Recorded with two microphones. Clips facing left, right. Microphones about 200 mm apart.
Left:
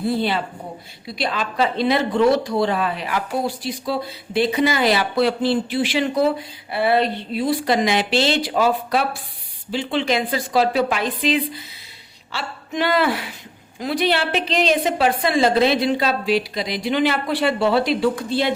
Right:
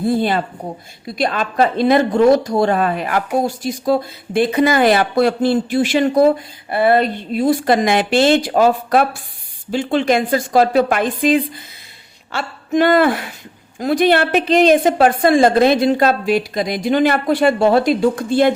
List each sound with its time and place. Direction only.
0.0 s speech: 45° right (ahead or behind)